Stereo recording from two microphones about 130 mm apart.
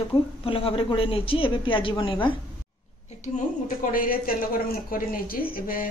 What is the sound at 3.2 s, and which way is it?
Speech, 90° left.